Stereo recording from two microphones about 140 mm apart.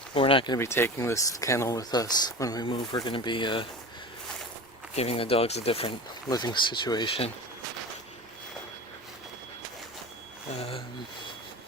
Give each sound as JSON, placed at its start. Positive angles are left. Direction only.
{"t": 0.1, "sound": "speech", "side_deg": 40}
{"t": 0.6, "sound": "speech", "side_deg": 20}
{"t": 4.9, "sound": "speech", "side_deg": 45}
{"t": 6.2, "sound": "speech", "side_deg": 30}
{"t": 10.6, "sound": "speech", "side_deg": 40}